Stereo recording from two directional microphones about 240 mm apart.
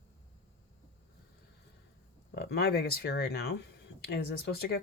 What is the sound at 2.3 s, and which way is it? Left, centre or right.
Speech, left.